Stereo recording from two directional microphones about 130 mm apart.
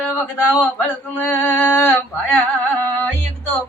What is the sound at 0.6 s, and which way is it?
Male singing, 15° left (ahead or behind).